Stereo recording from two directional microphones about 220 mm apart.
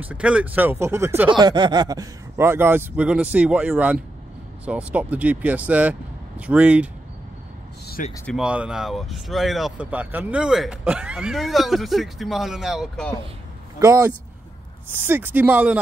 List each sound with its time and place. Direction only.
0.0 s speech: 5° right (ahead or behind)
7.8 s a sound: 45° left (ahead or behind)
8.3 s speech: 5° right (ahead or behind)
13.7 s speech: 15° right (ahead or behind)